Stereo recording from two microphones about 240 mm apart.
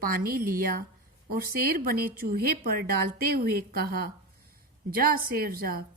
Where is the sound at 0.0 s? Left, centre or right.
Right.